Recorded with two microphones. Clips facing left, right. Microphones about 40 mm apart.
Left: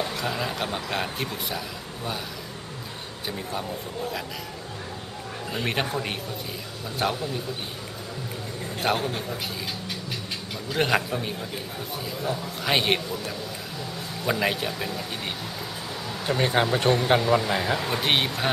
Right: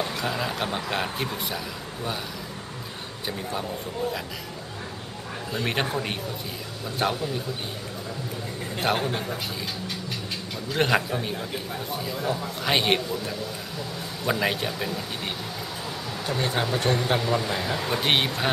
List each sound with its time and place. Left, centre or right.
0.0 s a man's voice: centre
5.5 s a man's voice: centre
8.9 s a man's voice: centre
10.7 s a man's voice: centre
14.2 s a man's voice: centre
16.3 s speech: left
16.6 s speech: centre
17.8 s a man's voice: centre